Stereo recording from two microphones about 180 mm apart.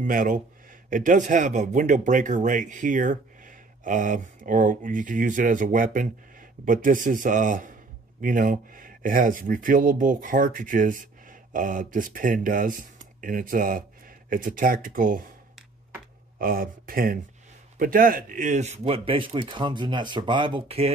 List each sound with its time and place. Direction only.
0.0 s speech: 50° right (ahead or behind)
16.3 s a man's voice: 55° right (ahead or behind); by 20.9 s 35° right (ahead or behind)